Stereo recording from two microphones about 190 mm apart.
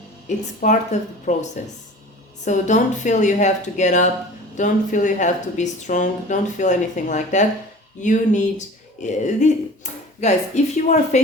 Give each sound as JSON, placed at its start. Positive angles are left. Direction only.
{"t": 0.3, "sound": "speech", "side_deg": 40}